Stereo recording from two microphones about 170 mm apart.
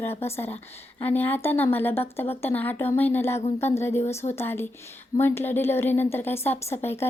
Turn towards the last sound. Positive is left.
turn(degrees=15)  # may be behind; listen again after turning